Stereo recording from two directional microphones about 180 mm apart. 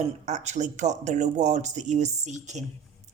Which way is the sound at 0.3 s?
40° right (ahead or behind).